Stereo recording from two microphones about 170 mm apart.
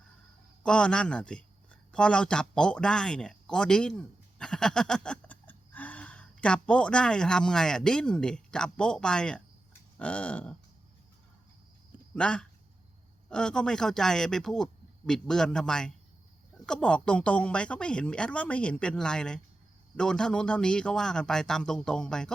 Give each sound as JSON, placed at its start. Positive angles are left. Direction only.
{"t": 0.6, "sound": "speech", "side_deg": 5}
{"t": 12.1, "sound": "speech", "side_deg": 5}